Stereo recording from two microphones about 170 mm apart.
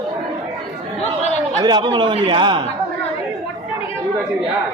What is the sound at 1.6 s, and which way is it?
A man's voice, 25° right (ahead or behind).